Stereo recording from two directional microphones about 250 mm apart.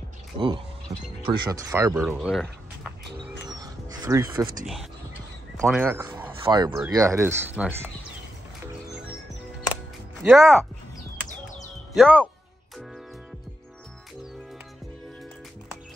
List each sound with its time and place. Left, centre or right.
1.3 s speech: centre
2.0 s speech: centre
3.2 s dog: centre
5.7 s speech: centre
10.2 s speech: centre
11.2 s music: left
11.9 s speech: centre